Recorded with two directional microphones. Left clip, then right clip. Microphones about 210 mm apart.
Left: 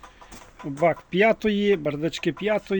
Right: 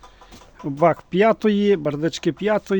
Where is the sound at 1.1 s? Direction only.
25° right (ahead or behind).